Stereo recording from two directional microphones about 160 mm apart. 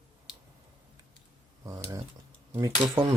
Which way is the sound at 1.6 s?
20° right (ahead or behind).